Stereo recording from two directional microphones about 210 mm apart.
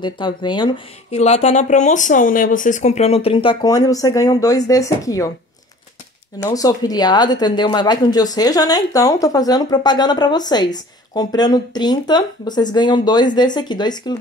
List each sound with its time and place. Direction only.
0.0 s speech: 20° left (ahead or behind)
1.1 s speech: 30° left (ahead or behind); by 5.3 s 15° left (ahead or behind)
6.4 s speech: 15° left (ahead or behind)